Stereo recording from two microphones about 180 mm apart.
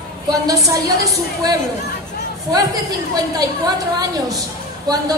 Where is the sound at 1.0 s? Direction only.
20° right (ahead or behind).